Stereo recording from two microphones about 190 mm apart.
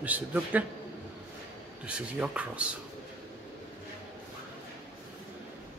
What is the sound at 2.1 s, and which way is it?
Speech, 5° right (ahead or behind).